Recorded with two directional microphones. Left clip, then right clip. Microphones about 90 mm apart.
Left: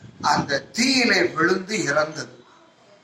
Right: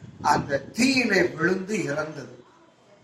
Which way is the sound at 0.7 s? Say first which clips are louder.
Left 3 dB; 40° left (ahead or behind).